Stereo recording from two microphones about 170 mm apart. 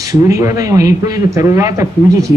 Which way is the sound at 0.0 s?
20° right (ahead or behind).